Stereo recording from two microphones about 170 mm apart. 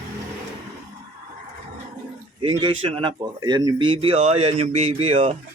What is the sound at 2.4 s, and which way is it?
Speech, 30° right (ahead or behind).